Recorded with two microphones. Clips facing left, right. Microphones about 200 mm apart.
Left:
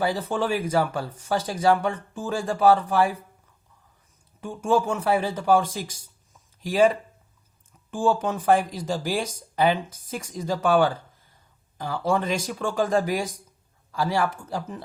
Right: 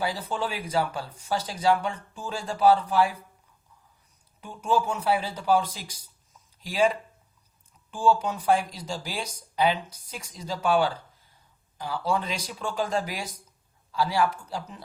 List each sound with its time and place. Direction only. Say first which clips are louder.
0.0 s speech: left 5 dB; 45° left (ahead or behind)
4.4 s speech: left 3 dB; 45° left (ahead or behind)